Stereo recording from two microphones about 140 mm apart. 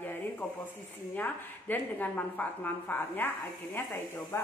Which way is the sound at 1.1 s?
15° left (ahead or behind).